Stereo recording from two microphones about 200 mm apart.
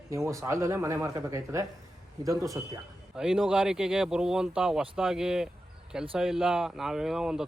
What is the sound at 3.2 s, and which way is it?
Speech, 5° right (ahead or behind).